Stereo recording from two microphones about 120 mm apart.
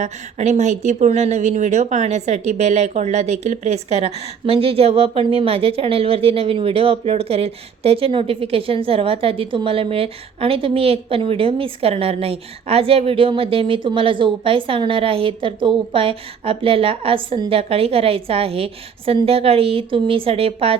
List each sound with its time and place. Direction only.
0.0 s speech: 80° right; by 20.7 s 50° right (ahead or behind)